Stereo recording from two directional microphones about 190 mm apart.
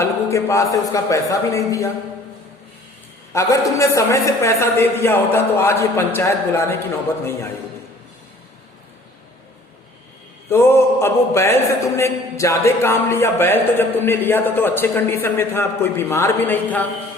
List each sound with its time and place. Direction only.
0.0 s speech: 15° left (ahead or behind)
3.3 s speech: 15° left (ahead or behind)
10.5 s speech: 15° left (ahead or behind)